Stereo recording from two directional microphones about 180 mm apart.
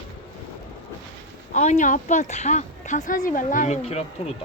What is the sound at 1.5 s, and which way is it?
Speech, 40° left (ahead or behind).